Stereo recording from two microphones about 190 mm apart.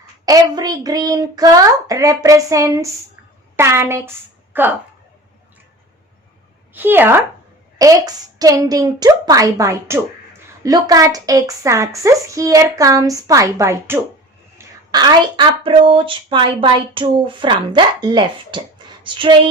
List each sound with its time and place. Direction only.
0.3 s a woman's voice: 20° right (ahead or behind)
6.7 s a woman's voice: 10° right (ahead or behind); by 19.3 s 25° right (ahead or behind)